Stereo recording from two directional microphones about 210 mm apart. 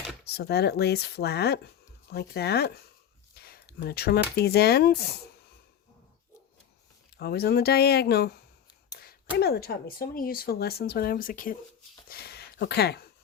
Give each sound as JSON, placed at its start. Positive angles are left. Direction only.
{"t": 0.3, "sound": "speech", "side_deg": 50}
{"t": 7.2, "sound": "speech", "side_deg": 50}